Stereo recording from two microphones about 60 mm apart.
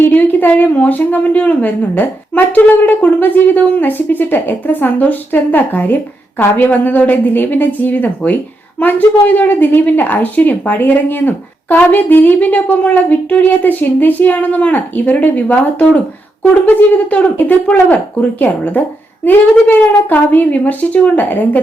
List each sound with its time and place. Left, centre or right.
0.0 s a woman's voice: left